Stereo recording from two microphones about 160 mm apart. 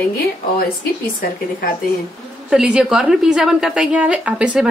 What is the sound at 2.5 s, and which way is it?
A woman's voice, 5° right (ahead or behind).